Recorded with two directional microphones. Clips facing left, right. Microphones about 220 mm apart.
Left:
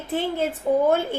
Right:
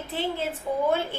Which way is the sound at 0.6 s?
60° left (ahead or behind).